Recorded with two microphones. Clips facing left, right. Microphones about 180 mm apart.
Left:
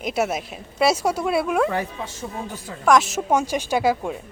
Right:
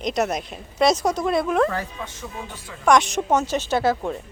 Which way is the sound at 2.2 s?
40° left (ahead or behind).